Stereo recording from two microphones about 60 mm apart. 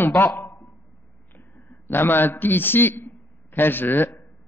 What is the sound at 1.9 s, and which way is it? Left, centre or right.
A man's voice, left.